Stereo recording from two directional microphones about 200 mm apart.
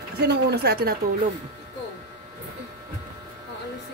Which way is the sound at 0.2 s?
55° right (ahead or behind).